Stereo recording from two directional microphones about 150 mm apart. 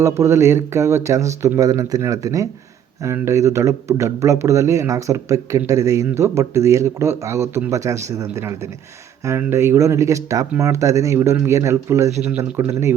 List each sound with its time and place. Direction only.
0.0 s speech: 20° right (ahead or behind)